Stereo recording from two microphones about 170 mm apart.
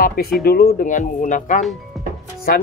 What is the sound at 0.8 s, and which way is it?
Speech, 50° left (ahead or behind).